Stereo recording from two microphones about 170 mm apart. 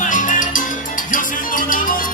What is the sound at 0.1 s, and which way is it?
Salsa music, 50° left (ahead or behind).